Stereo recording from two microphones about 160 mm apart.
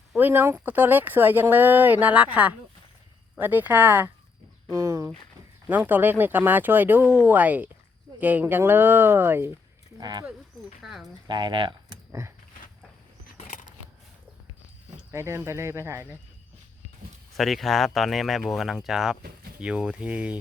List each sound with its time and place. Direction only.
0.2 s speech: 15° right (ahead or behind)
10.0 s speech: 25° right (ahead or behind)
10.8 s speech: centre (ahead or behind)
11.3 s speech: 25° right (ahead or behind)
13.3 s a sound: 50° left (ahead or behind)
15.1 s speech: 15° right (ahead or behind)
17.3 s speech: centre (ahead or behind)